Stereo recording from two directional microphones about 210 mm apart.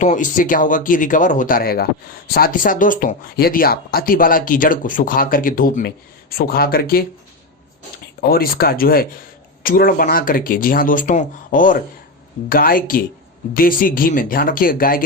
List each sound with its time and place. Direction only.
0.0 s speech: 35° left (ahead or behind)
8.2 s speech: 45° left (ahead or behind)